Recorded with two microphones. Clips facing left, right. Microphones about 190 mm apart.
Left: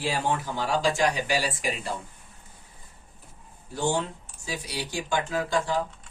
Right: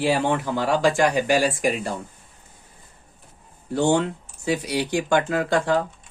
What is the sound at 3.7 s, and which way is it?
Speech, 65° right (ahead or behind).